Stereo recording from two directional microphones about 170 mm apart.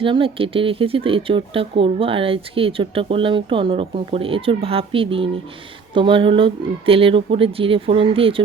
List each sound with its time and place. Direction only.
0.0 s speech: 30° right (ahead or behind)